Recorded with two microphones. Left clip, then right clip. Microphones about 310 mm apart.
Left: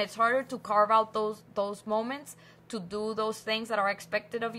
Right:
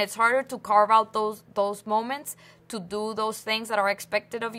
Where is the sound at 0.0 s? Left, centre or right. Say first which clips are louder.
Right 4 dB; right.